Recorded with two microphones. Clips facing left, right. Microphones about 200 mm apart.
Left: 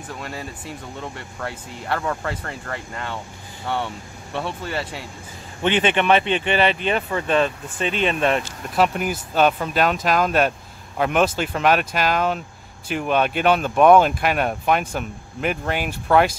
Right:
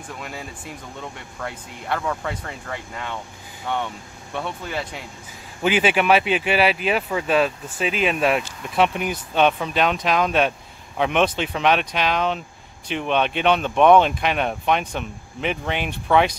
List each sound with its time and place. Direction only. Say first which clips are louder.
0.1 s speech: left 2 dB; centre (ahead or behind)